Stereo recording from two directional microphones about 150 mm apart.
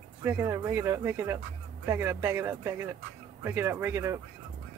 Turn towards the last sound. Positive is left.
turn(degrees=-15)  # may be behind; listen again after turning